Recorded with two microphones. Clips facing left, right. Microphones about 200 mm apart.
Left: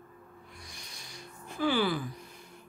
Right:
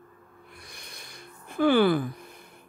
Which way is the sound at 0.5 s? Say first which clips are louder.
Right 2 dB; 55° right (ahead or behind).